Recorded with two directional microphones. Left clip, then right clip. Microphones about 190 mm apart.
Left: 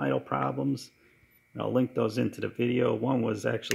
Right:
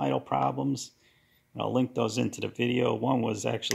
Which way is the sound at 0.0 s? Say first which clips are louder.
Right 2 dB; 5° left (ahead or behind).